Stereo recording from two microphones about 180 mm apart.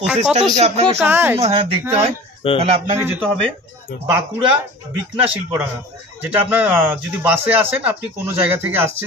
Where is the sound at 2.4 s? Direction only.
30° left (ahead or behind).